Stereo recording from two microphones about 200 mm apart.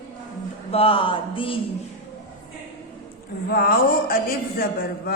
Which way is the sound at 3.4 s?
50° left (ahead or behind).